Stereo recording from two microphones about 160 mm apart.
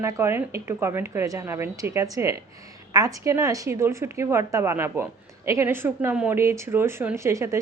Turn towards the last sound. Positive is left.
turn(degrees=-20)  # may be behind; listen again after turning